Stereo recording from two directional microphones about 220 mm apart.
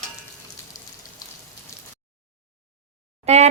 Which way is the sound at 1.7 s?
15° left (ahead or behind).